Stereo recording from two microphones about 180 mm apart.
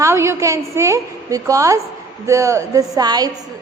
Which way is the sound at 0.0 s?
15° right (ahead or behind).